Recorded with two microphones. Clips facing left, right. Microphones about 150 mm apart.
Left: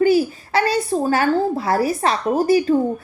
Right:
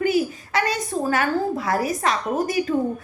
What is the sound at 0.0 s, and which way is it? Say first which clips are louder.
A woman's voice: left 5 dB; 30° left (ahead or behind).